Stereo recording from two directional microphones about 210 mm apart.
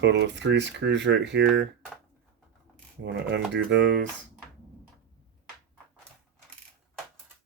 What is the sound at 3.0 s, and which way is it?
Speech, 55° right (ahead or behind).